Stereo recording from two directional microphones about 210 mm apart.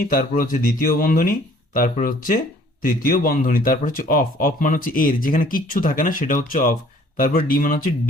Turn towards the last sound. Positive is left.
turn(degrees=40)  # may be behind; listen again after turning